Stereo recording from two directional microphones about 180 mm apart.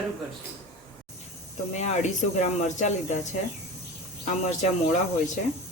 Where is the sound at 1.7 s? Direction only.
40° left (ahead or behind).